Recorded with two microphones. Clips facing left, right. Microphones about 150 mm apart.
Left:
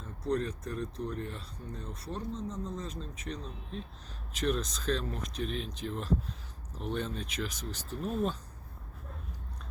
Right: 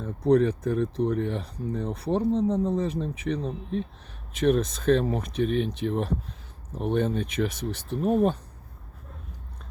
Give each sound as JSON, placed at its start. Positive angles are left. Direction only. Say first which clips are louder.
{"t": 0.0, "sound": "speech", "louder": "right 11 dB", "side_deg": -65}
{"t": 4.4, "sound": "speech", "louder": "right 9 dB", "side_deg": -55}